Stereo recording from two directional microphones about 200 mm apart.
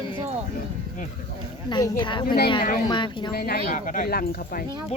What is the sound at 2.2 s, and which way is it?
Speech, 50° left (ahead or behind).